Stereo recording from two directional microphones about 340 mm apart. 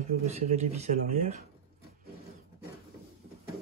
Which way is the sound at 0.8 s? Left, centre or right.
Centre.